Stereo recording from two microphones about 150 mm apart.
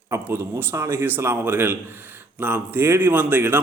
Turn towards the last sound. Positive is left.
turn(degrees=-10)  # may be behind; listen again after turning